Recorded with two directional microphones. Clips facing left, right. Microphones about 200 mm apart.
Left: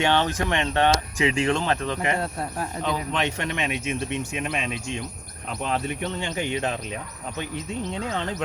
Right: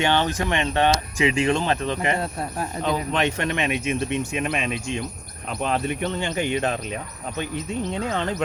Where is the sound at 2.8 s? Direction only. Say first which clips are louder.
Right 4 dB; 50° right (ahead or behind).